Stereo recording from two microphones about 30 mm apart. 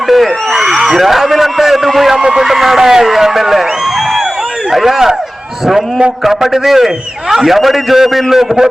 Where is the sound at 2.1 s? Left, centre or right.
Centre.